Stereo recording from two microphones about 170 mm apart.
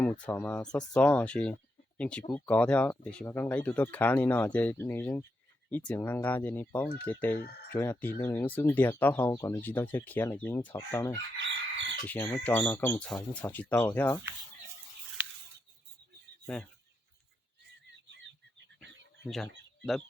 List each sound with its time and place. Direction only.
0.0 s speech: 10° left (ahead or behind)
11.3 s chicken: 90° right
12.0 s speech: 10° left (ahead or behind)
19.3 s speech: centre (ahead or behind)